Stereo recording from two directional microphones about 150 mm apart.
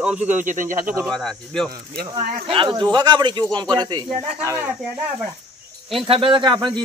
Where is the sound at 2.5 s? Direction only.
35° right (ahead or behind).